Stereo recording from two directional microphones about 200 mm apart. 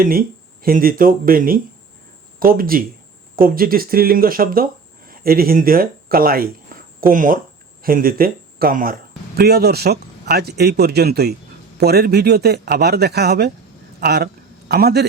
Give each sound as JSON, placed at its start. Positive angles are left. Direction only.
{"t": 0.0, "sound": "speech", "side_deg": -45}